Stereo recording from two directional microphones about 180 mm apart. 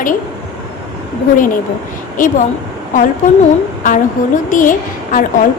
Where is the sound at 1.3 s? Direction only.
50° left (ahead or behind).